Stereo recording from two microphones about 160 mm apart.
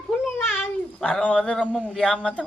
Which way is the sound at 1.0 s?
5° left (ahead or behind).